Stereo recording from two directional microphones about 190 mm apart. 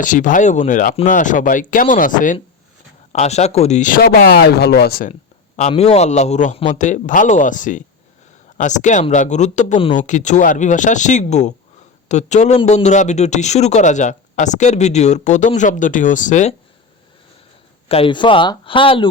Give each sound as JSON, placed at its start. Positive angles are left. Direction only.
{"t": 0.0, "sound": "speech", "side_deg": 45}
{"t": 5.5, "sound": "a man's voice", "side_deg": 35}
{"t": 17.8, "sound": "speech", "side_deg": 30}